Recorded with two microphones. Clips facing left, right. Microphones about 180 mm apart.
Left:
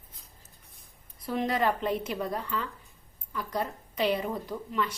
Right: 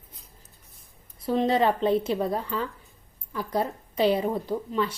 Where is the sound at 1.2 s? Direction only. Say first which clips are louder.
Right 5 dB; 30° right (ahead or behind).